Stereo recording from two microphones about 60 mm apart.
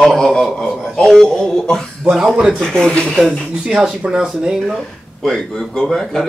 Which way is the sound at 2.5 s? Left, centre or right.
Centre.